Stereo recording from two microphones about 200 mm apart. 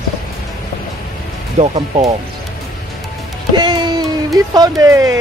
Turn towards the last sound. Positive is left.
turn(degrees=-15)  # may be behind; listen again after turning